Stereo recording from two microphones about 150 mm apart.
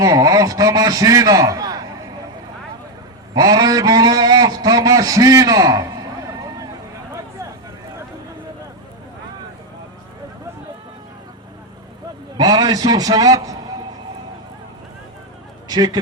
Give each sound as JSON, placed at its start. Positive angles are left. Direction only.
{"t": 0.0, "sound": "a man's voice", "side_deg": -25}
{"t": 3.3, "sound": "speech", "side_deg": -25}
{"t": 12.4, "sound": "a man's voice", "side_deg": -25}
{"t": 15.7, "sound": "a man's voice", "side_deg": -25}